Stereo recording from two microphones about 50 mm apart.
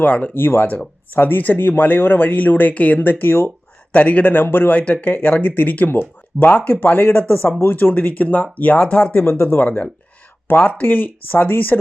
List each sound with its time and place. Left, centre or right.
0.0 s speech: left
0.3 s speech: left
4.3 s speech: left
9.4 s speech: left